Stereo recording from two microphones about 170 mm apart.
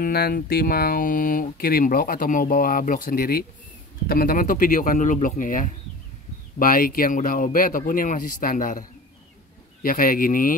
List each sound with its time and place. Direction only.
0.0 s speech: 60° left (ahead or behind)
9.8 s speech: 55° left (ahead or behind)